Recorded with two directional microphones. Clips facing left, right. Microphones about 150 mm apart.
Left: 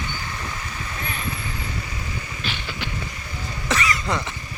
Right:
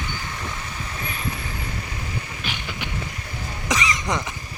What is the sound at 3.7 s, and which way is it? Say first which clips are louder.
Cough: even; 15° right (ahead or behind).